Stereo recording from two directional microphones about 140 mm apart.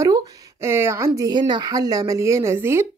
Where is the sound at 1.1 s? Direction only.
30° right (ahead or behind).